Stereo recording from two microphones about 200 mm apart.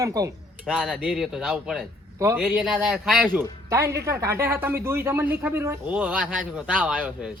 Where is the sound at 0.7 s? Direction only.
5° right (ahead or behind).